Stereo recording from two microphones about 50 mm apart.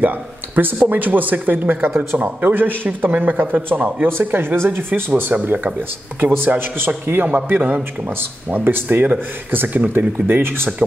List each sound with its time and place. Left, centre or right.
0.6 s speech: right
1.7 s a man's voice: right
2.1 s a man's voice: right